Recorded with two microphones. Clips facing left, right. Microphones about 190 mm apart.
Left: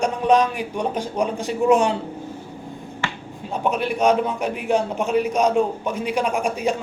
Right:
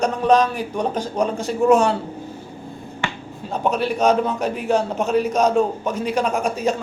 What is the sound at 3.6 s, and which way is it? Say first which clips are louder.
A man's voice: right 1 dB; 35° right (ahead or behind).